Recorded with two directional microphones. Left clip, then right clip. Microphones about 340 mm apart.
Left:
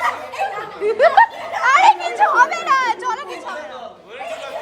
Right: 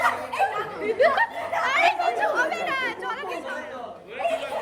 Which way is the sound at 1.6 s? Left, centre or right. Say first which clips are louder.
Left 9 dB; left.